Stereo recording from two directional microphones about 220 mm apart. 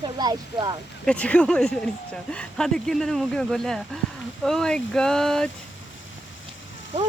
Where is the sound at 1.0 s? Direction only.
5° left (ahead or behind).